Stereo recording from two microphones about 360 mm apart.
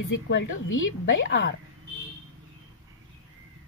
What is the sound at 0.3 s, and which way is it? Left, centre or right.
Speech, left.